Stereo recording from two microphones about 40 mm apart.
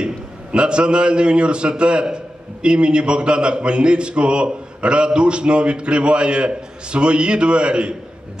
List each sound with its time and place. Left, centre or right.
0.0 s a man's voice: right